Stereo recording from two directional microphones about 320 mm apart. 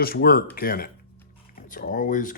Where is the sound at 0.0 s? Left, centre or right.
Left.